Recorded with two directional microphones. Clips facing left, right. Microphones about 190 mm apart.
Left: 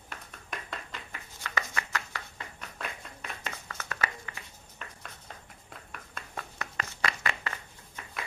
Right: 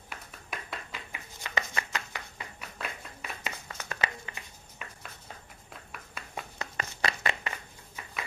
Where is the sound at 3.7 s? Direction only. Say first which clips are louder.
Even; 20° right (ahead or behind).